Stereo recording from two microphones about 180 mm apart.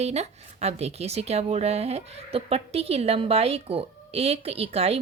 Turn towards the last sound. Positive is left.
turn(degrees=-35)  # may be behind; listen again after turning